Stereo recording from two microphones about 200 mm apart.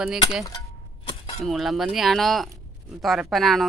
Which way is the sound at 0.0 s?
Centre (ahead or behind).